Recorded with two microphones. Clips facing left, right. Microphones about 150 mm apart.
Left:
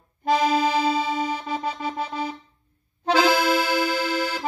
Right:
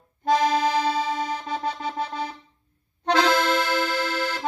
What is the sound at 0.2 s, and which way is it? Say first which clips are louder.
Accordion: even; 5° left (ahead or behind).